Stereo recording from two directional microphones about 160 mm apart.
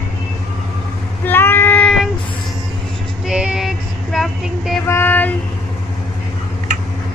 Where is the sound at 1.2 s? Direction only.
15° left (ahead or behind).